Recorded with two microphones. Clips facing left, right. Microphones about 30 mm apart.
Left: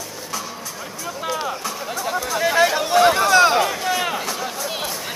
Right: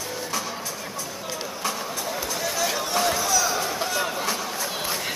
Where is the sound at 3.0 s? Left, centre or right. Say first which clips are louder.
Left 11 dB; left.